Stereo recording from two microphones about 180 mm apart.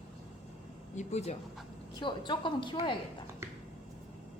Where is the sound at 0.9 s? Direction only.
40° left (ahead or behind).